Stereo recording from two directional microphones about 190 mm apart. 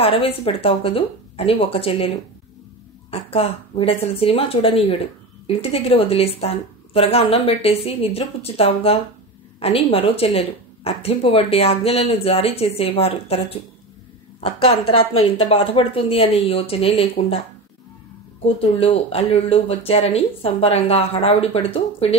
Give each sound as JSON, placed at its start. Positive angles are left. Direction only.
{"t": 0.0, "sound": "a woman's voice", "side_deg": 30}
{"t": 3.1, "sound": "speech", "side_deg": 30}
{"t": 15.3, "sound": "a woman's voice", "side_deg": 35}
{"t": 18.4, "sound": "speech", "side_deg": 30}